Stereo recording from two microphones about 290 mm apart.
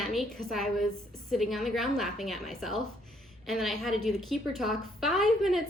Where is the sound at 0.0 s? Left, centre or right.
Centre.